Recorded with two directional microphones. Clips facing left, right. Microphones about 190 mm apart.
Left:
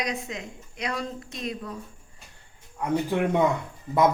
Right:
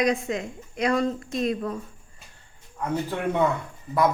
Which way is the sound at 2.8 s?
15° left (ahead or behind).